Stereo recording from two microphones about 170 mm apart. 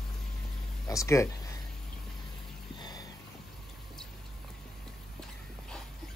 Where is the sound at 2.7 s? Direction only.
25° left (ahead or behind).